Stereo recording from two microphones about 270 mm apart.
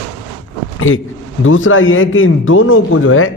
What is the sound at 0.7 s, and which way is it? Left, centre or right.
A man's voice, left.